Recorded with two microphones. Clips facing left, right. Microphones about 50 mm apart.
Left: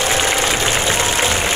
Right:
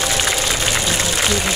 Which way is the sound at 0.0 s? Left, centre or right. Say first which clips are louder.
Left 3 dB; left.